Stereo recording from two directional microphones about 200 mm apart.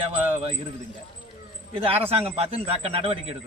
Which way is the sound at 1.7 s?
30° right (ahead or behind).